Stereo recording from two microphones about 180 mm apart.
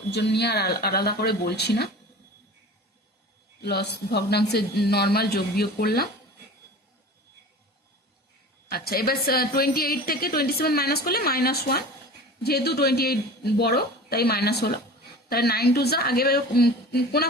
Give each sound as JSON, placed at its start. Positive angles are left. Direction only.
{"t": 0.1, "sound": "a woman's voice", "side_deg": 70}
{"t": 3.6, "sound": "a woman's voice", "side_deg": 65}
{"t": 8.7, "sound": "a woman's voice", "side_deg": 55}